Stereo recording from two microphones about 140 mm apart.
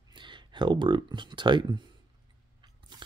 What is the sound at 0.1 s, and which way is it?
Speech, 35° right (ahead or behind).